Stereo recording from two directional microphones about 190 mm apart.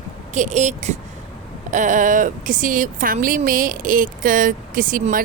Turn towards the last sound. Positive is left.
turn(degrees=-45)  # may be behind; listen again after turning